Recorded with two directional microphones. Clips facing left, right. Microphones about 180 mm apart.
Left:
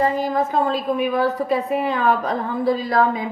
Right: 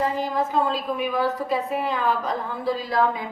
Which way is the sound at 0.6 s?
55° left (ahead or behind).